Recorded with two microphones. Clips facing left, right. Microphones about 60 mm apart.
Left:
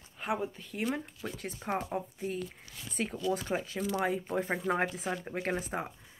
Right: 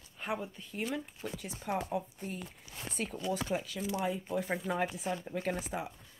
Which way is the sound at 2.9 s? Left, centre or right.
Right.